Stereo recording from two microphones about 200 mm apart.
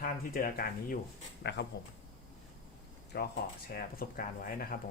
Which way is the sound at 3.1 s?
50° left (ahead or behind).